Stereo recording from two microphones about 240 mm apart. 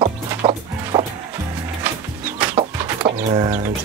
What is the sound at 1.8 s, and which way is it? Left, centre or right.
Music, centre.